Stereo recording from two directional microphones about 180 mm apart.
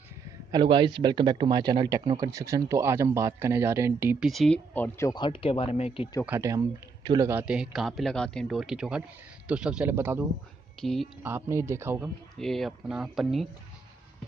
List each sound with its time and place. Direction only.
0.5 s a man's voice: 25° right (ahead or behind)
4.3 s speech: 5° left (ahead or behind); by 6.0 s 35° left (ahead or behind)
6.2 s speech: 15° right (ahead or behind)
7.2 s speech: 10° right (ahead or behind)
10.8 s speech: centre (ahead or behind)
11.2 s speech: 15° right (ahead or behind)
12.4 s speech: centre (ahead or behind)